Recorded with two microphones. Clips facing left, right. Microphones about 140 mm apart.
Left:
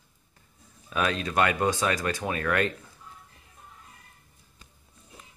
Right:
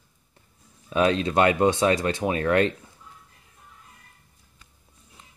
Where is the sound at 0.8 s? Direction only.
25° right (ahead or behind).